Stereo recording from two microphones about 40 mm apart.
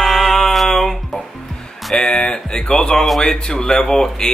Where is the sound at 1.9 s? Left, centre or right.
Centre.